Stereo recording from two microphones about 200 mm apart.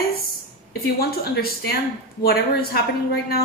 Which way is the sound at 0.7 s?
50° left (ahead or behind).